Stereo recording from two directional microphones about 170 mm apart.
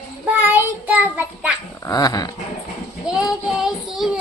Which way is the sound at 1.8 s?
20° left (ahead or behind).